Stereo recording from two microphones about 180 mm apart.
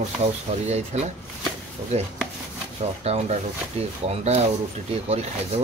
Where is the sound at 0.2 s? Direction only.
35° right (ahead or behind).